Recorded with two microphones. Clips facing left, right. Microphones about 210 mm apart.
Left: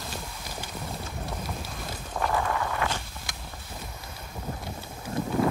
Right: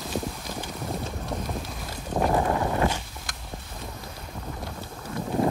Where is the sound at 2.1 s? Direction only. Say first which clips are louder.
Right 5 dB; 35° right (ahead or behind).